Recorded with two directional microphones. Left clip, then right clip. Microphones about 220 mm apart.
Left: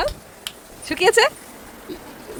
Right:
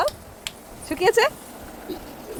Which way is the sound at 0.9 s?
20° left (ahead or behind).